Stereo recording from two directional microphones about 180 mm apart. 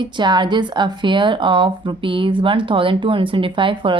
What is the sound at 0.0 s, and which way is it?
Speech, 25° right (ahead or behind).